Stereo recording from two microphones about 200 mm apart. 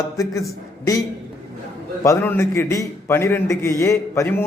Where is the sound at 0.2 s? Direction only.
15° left (ahead or behind).